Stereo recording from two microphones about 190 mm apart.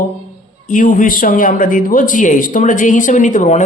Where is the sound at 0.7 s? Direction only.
45° left (ahead or behind).